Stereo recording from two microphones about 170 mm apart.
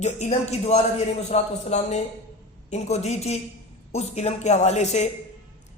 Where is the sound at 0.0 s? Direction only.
40° left (ahead or behind).